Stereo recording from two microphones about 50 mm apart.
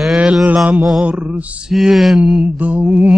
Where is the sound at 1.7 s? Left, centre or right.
Centre.